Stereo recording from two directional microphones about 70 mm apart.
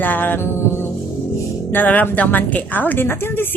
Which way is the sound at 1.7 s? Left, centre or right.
Left.